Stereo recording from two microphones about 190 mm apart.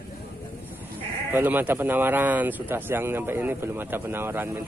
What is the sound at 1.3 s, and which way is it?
Speech, 10° right (ahead or behind).